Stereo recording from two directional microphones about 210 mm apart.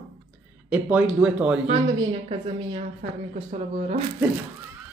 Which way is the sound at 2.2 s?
30° right (ahead or behind).